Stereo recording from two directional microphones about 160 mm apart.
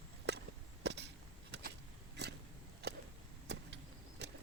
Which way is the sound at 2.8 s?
90° right.